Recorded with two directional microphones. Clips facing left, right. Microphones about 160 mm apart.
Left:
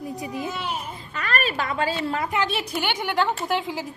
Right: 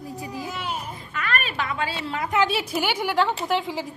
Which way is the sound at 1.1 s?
40° left (ahead or behind).